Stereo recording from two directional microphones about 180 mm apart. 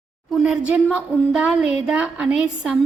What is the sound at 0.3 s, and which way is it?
Speech, centre (ahead or behind).